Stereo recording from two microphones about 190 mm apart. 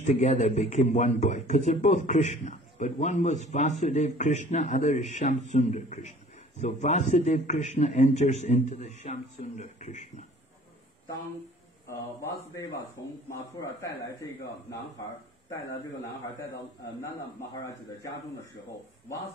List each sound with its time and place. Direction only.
0.0 s a man's voice: 35° left (ahead or behind)
11.9 s speech: 15° left (ahead or behind)
17.0 s speech: 15° left (ahead or behind)